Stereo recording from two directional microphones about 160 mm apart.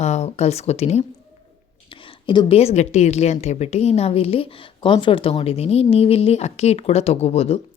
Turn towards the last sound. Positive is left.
turn(degrees=40)  # may be behind; listen again after turning